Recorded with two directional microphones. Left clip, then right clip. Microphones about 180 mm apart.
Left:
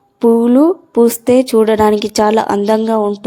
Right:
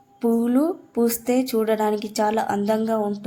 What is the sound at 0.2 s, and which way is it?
Speech, 35° left (ahead or behind).